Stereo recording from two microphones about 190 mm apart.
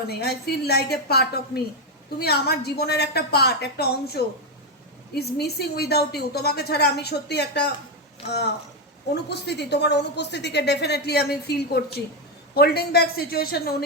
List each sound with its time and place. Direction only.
0.1 s a woman's voice: 55° left (ahead or behind)